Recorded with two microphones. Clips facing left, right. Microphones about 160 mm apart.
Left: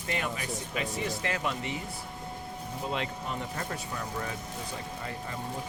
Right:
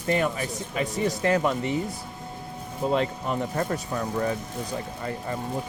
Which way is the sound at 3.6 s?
40° right (ahead or behind).